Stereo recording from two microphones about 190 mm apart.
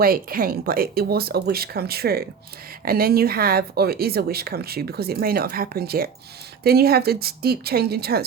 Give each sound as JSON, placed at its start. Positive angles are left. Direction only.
{"t": 0.0, "sound": "a woman's voice", "side_deg": -50}